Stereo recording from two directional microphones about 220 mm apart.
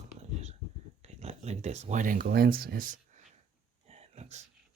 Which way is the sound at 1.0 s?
30° right (ahead or behind).